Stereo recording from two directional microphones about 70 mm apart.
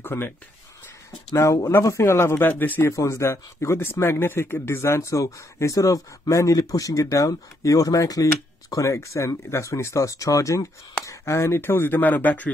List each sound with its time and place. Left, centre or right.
0.0 s speech: left
1.3 s speech: left
3.1 s speech: left